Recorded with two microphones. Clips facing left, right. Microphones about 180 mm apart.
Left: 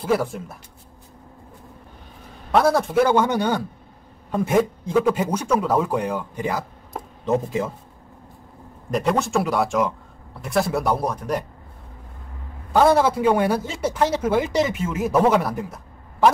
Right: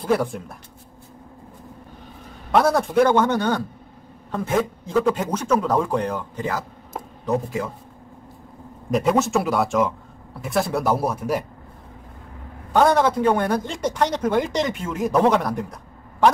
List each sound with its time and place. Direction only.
0.0 s speech: centre (ahead or behind)
2.5 s a man's voice: centre (ahead or behind); by 7.7 s 20° left (ahead or behind)
8.9 s speech: centre (ahead or behind)
12.7 s speech: 5° left (ahead or behind)